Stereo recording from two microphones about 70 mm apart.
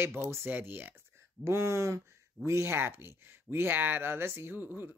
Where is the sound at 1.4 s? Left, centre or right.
Right.